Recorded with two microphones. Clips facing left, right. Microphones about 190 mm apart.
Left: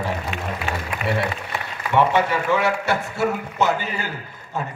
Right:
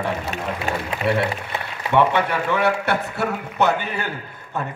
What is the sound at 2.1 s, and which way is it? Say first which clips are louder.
A man's voice: left 1 dB; 60° right (ahead or behind).